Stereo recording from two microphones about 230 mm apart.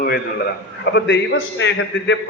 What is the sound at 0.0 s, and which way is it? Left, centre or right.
A man's voice, left.